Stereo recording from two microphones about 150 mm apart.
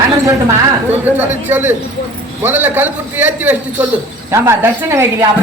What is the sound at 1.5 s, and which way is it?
A man's voice, 15° right (ahead or behind).